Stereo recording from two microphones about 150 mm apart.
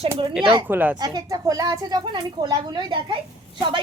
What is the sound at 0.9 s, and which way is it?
Speech, 25° right (ahead or behind).